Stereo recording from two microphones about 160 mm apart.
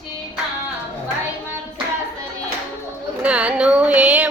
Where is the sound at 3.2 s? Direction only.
5° right (ahead or behind).